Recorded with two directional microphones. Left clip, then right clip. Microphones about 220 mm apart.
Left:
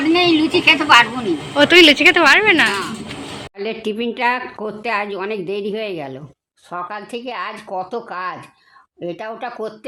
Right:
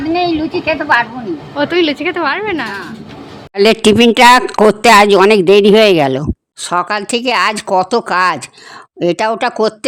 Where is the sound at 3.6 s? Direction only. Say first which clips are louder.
Right 15 dB; 50° right (ahead or behind).